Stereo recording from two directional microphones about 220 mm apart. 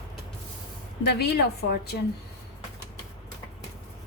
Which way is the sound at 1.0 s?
50° left (ahead or behind).